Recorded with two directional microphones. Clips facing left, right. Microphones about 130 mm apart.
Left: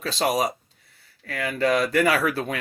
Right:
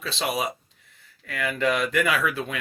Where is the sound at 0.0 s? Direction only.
40° left (ahead or behind).